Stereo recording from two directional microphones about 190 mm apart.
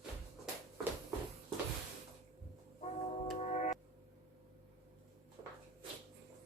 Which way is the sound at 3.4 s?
40° left (ahead or behind).